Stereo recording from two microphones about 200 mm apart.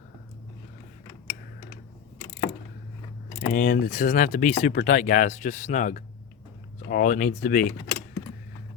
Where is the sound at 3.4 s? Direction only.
45° left (ahead or behind).